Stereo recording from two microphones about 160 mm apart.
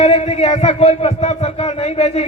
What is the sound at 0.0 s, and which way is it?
A man's voice, 40° left (ahead or behind).